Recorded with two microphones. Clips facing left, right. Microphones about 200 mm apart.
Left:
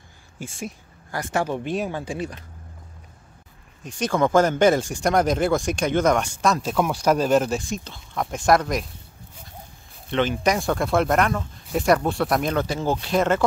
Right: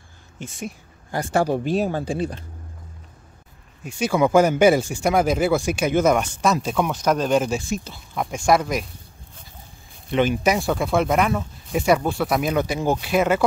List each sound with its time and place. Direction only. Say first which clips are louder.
1.1 s speech: right 4 dB; 30° right (ahead or behind)
3.8 s speech: right 2 dB; 5° right (ahead or behind)
10.1 s speech: right 2 dB; 10° right (ahead or behind)